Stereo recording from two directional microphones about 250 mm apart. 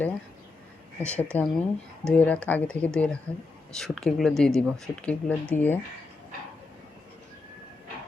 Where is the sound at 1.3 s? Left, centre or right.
Centre.